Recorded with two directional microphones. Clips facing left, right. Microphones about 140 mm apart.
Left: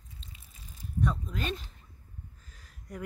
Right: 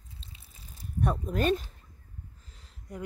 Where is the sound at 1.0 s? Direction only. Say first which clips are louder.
Right 4 dB; 55° right (ahead or behind).